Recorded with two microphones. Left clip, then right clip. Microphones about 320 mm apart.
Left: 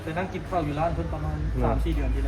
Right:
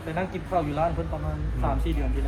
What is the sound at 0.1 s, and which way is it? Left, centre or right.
Speech, right.